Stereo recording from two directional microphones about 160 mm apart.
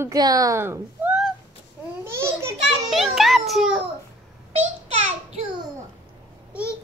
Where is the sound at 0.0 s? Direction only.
20° right (ahead or behind).